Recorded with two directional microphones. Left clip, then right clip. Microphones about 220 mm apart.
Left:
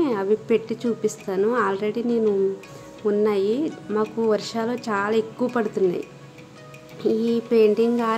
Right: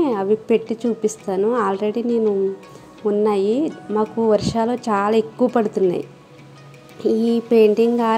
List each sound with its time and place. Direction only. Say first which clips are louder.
0.0 s speech: right 3 dB; 10° right (ahead or behind)
3.3 s speech: right 3 dB; 15° right (ahead or behind)